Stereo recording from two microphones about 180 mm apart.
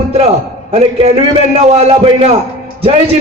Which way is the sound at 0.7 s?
35° right (ahead or behind).